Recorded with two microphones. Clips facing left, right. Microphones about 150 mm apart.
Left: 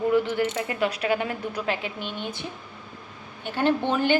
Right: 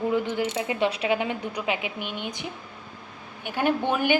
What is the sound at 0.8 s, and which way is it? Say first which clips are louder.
A woman's voice: even; 25° right (ahead or behind).